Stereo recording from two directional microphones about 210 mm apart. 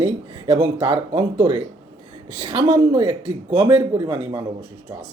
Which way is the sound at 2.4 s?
20° right (ahead or behind).